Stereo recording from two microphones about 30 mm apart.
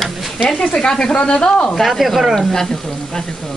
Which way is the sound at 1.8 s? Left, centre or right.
Centre.